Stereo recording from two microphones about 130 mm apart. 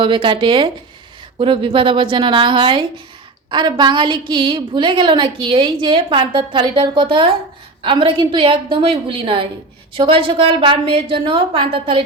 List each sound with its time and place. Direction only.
0.0 s a woman's voice: 40° right (ahead or behind)